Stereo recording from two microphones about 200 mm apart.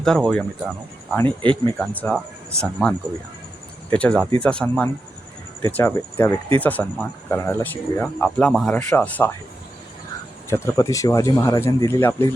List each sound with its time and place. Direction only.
0.0 s speech: centre (ahead or behind)
1.4 s speech: 25° right (ahead or behind)
1.8 s speech: 5° left (ahead or behind)
10.5 s speech: 15° left (ahead or behind)